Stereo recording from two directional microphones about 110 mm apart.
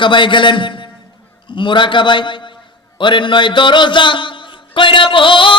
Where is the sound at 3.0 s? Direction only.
45° left (ahead or behind).